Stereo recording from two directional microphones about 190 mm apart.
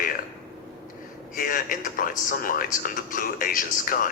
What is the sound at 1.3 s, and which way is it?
Speech, 45° left (ahead or behind).